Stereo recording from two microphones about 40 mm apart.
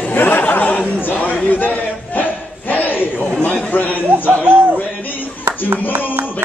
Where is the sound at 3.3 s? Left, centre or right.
Left.